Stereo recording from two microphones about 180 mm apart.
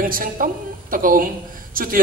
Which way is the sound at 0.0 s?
50° right (ahead or behind).